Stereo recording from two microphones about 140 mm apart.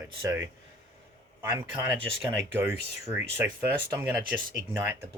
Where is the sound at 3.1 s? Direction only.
15° right (ahead or behind).